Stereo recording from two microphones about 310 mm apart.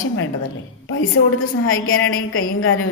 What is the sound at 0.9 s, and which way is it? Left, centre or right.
A woman's voice, left.